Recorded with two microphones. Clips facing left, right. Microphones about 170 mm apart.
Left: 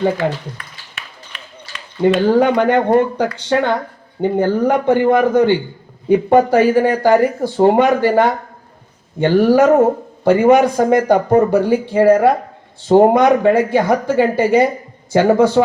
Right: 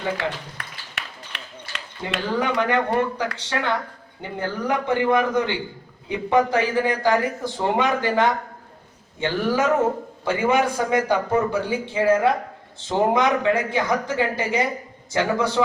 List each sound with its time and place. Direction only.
2.2 s speech: 55° left (ahead or behind)